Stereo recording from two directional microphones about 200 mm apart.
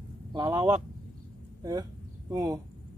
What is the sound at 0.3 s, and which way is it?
Speech, 20° right (ahead or behind).